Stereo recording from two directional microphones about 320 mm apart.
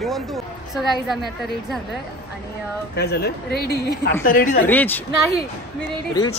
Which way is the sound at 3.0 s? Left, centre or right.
Left.